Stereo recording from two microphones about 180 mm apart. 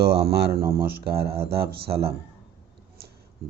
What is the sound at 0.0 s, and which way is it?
A man's voice, 60° right (ahead or behind).